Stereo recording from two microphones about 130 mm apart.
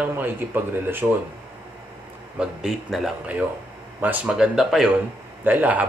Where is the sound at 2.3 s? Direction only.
5° right (ahead or behind).